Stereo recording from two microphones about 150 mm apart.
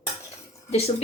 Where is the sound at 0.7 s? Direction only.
45° left (ahead or behind).